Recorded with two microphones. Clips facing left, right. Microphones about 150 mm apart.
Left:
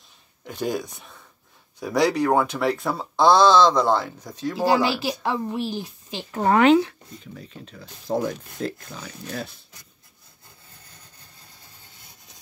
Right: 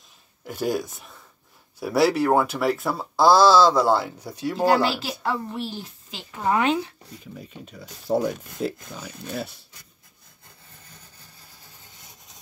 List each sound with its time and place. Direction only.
0.5 s speech: 5° right (ahead or behind)
4.6 s a woman's voice: 10° left (ahead or behind)
6.3 s a woman's voice: 60° left (ahead or behind); by 7.0 s 90° left
7.3 s speech: 10° right (ahead or behind)